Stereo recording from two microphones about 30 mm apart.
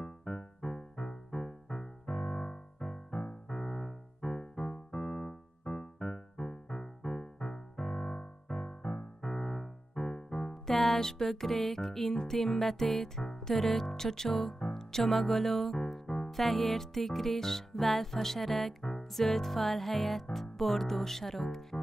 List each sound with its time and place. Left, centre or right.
0.0 s music: centre
3.4 s keyboard: centre
8.2 s music: left
10.5 s music: centre
13.9 s speech: centre
15.9 s music: centre
20.3 s speech: centre